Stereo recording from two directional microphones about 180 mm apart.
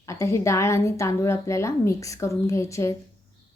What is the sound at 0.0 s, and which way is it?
A woman's voice, 15° left (ahead or behind).